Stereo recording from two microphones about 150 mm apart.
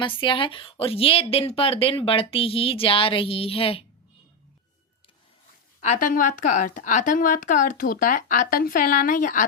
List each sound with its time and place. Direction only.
0.0 s speech: 35° left (ahead or behind)
5.8 s a woman's voice: 60° left (ahead or behind)